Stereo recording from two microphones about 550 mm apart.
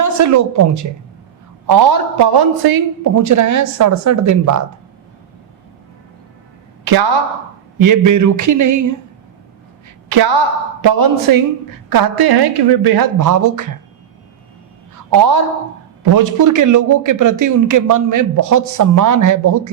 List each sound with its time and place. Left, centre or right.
0.0 s a man's voice: right
6.8 s a woman's voice: right
10.1 s a woman's voice: right
15.1 s a man's voice: right